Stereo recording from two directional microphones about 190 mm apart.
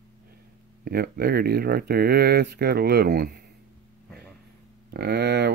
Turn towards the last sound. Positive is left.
turn(degrees=-60)  # may be behind; listen again after turning